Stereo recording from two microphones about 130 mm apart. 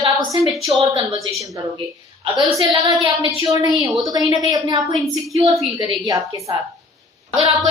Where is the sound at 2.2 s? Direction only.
40° right (ahead or behind).